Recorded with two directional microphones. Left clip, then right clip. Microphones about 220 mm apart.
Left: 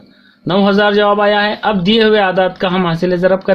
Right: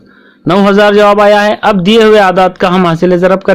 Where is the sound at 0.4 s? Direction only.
40° right (ahead or behind).